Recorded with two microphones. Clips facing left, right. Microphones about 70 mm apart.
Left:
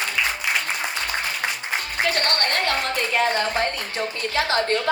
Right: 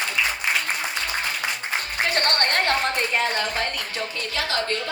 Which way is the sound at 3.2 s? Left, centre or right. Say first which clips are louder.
Left 3 dB; left.